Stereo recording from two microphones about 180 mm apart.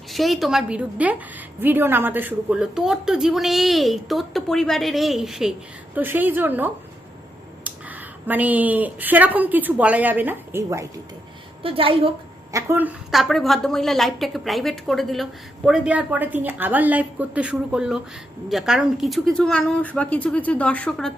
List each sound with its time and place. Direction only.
0.1 s a woman's voice: centre (ahead or behind); by 10.8 s 15° right (ahead or behind)
11.6 s a woman's voice: 30° right (ahead or behind)
12.5 s a woman's voice: 15° right (ahead or behind); by 21.1 s 5° left (ahead or behind)